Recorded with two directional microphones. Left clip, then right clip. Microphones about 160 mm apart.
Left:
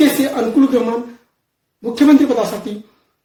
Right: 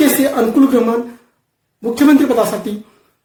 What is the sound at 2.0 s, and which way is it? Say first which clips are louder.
Speech: right 1 dB; 15° right (ahead or behind).